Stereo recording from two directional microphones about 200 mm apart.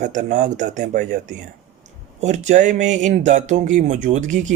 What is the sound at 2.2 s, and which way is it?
Speech, 35° right (ahead or behind).